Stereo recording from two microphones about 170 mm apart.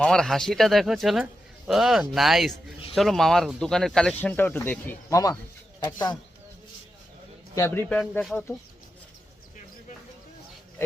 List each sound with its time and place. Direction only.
0.0 s speech: 5° left (ahead or behind); by 6.1 s 25° left (ahead or behind)
7.5 s speech: 15° left (ahead or behind)